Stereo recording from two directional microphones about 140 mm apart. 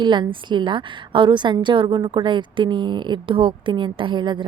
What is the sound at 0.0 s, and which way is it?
A woman's voice, 35° right (ahead or behind).